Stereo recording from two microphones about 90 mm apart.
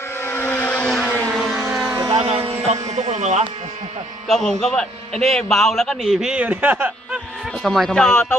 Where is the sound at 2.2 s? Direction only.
90° right.